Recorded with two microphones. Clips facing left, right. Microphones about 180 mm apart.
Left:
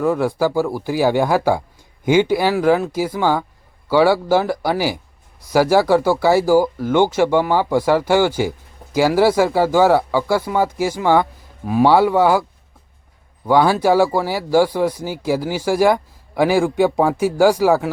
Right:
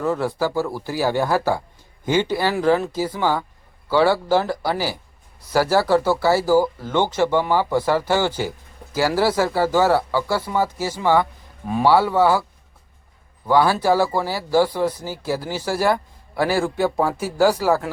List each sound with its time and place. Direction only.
0.0 s speech: 10° left (ahead or behind)
11.6 s speech: 5° left (ahead or behind)
11.9 s speech: 15° left (ahead or behind)
13.5 s speech: 15° left (ahead or behind)